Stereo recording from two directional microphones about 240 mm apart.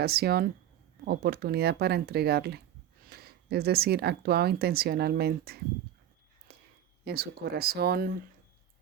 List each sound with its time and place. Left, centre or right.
0.0 s speech: right
6.5 s a sound: right
7.0 s speech: right